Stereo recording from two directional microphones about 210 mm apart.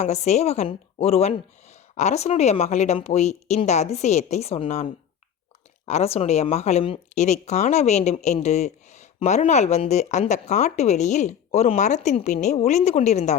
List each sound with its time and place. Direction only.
0.0 s a woman's voice: 30° left (ahead or behind)